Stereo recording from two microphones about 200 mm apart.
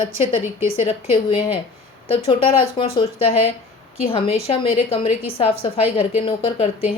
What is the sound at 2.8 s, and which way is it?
A woman's voice, 25° left (ahead or behind).